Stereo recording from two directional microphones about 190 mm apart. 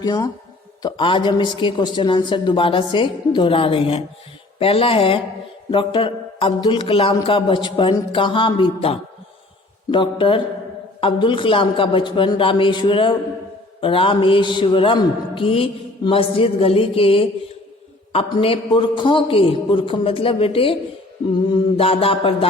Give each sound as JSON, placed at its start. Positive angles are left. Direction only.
{"t": 0.0, "sound": "a man's voice", "side_deg": 20}